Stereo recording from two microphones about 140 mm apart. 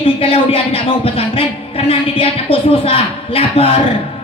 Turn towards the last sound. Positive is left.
turn(degrees=40)  # may be behind; listen again after turning